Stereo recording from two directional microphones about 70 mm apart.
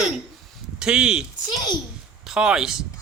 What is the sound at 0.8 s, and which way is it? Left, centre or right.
Speech, centre.